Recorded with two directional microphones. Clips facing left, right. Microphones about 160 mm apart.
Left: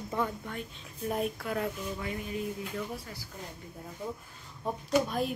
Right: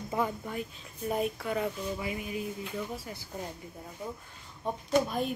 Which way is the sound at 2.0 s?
10° right (ahead or behind).